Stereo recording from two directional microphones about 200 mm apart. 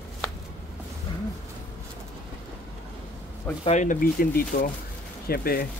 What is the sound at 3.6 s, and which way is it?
Speech, 35° left (ahead or behind).